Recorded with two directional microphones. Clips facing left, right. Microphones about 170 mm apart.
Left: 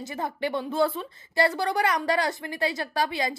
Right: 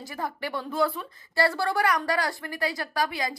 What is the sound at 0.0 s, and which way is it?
A woman's voice, 20° left (ahead or behind).